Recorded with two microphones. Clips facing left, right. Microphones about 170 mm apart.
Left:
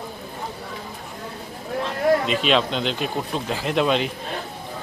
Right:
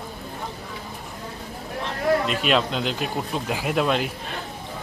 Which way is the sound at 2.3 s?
5° right (ahead or behind).